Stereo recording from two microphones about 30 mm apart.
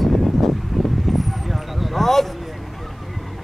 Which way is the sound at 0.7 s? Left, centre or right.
Centre.